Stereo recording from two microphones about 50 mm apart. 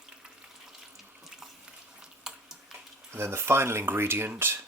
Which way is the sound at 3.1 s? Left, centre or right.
Right.